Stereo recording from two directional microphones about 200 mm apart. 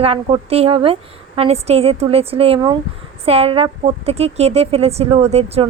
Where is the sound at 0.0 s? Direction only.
30° right (ahead or behind).